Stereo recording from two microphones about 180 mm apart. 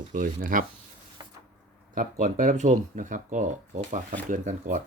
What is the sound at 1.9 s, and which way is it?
Speech, 45° right (ahead or behind).